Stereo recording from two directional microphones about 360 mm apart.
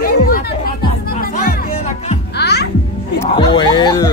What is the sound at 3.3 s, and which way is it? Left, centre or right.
Speech, centre.